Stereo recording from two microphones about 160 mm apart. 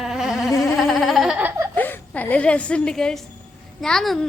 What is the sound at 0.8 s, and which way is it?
Baby laughter, centre (ahead or behind).